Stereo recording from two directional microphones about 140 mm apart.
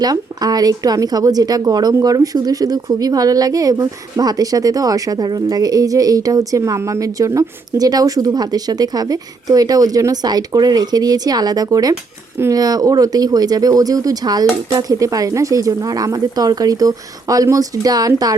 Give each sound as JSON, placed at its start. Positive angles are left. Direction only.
{"t": 0.0, "sound": "speech", "side_deg": -25}